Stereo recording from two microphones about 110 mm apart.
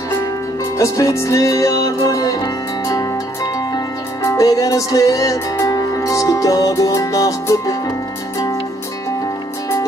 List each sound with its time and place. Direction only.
0.7 s music: 30° left (ahead or behind)
4.2 s music: 30° left (ahead or behind)